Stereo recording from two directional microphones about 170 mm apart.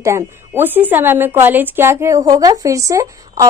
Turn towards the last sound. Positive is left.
turn(degrees=-20)  # may be behind; listen again after turning